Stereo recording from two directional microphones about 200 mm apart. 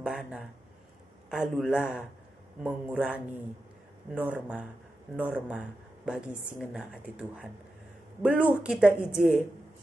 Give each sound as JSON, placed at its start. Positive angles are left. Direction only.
{"t": 0.0, "sound": "a woman's voice", "side_deg": -5}